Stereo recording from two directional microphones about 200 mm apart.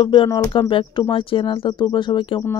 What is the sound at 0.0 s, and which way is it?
Speech, 25° left (ahead or behind).